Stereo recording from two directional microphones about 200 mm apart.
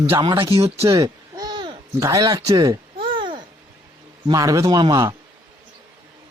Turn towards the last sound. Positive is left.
turn(degrees=-20)  # may be behind; listen again after turning